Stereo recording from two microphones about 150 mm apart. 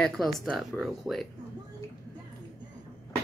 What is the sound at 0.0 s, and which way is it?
Speech, 5° left (ahead or behind).